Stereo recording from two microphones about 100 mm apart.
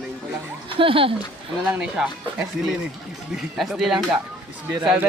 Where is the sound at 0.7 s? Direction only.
65° right (ahead or behind).